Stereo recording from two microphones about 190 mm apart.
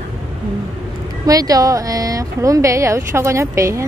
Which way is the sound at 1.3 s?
20° right (ahead or behind).